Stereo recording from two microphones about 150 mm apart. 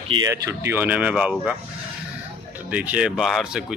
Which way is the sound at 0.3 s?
15° right (ahead or behind).